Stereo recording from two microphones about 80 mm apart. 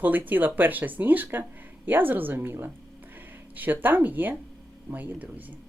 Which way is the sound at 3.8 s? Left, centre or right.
Right.